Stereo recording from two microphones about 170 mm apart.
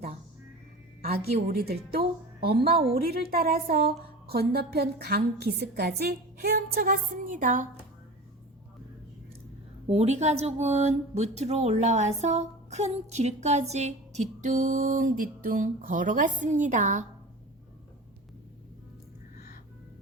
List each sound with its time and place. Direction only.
1.3 s a woman's voice: 65° right (ahead or behind)
9.8 s speech: 40° right (ahead or behind)